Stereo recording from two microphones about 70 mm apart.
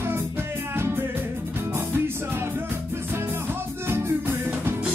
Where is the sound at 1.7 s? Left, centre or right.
Right.